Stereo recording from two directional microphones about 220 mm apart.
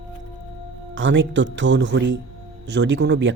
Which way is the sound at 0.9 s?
60° right (ahead or behind).